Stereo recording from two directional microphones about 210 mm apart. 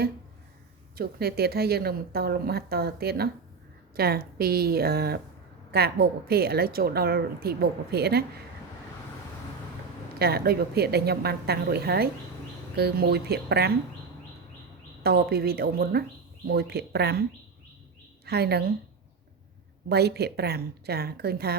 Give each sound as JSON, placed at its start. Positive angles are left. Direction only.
{"t": 0.9, "sound": "a woman's voice", "side_deg": -45}
{"t": 10.2, "sound": "a woman's voice", "side_deg": -50}
{"t": 15.0, "sound": "a woman's voice", "side_deg": -45}
{"t": 18.3, "sound": "a woman's voice", "side_deg": -50}
{"t": 19.9, "sound": "a woman's voice", "side_deg": -50}